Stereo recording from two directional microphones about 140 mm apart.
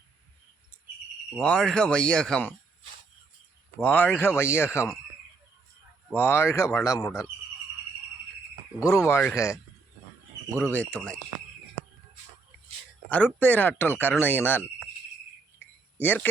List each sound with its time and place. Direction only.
1.4 s speech: 5° left (ahead or behind)
3.8 s speech: 10° left (ahead or behind)
6.1 s speech: 15° left (ahead or behind)
8.8 s speech: 20° left (ahead or behind)
10.5 s speech: 10° left (ahead or behind)
13.1 s speech: 10° left (ahead or behind)
15.5 s a sound: 15° left (ahead or behind)